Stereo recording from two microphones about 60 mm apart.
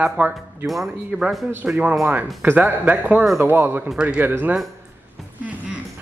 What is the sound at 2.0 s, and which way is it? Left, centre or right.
Speech, right.